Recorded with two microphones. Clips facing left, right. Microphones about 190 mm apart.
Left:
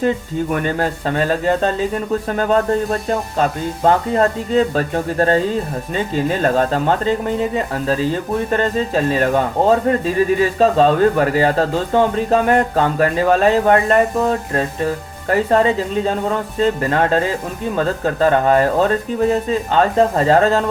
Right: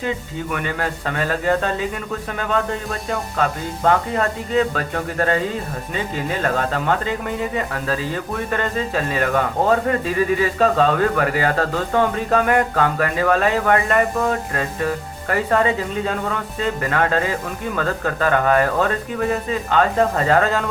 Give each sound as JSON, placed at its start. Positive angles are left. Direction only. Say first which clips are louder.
{"t": 0.5, "sound": "speech", "louder": "left 4 dB", "side_deg": 35}
{"t": 6.4, "sound": "speech", "louder": "left 4 dB", "side_deg": 30}